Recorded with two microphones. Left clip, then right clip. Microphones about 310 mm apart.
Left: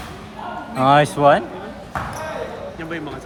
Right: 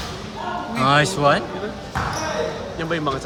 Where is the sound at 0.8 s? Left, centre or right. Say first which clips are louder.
Left 4 dB; centre.